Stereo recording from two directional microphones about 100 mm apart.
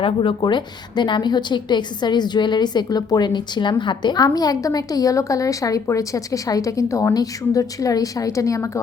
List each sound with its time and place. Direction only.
0.0 s a woman's voice: 55° left (ahead or behind); by 8.8 s 30° left (ahead or behind)